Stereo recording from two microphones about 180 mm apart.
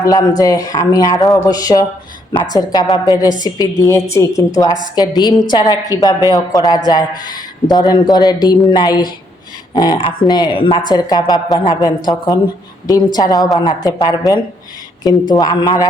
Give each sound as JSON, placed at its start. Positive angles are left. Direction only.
{"t": 0.0, "sound": "a woman's voice", "side_deg": 20}